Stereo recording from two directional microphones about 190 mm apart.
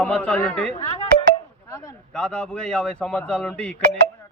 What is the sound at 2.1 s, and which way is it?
A man's voice, 5° left (ahead or behind).